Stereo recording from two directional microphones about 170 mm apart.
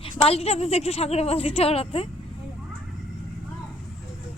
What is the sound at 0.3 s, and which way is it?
A woman's voice, 35° left (ahead or behind).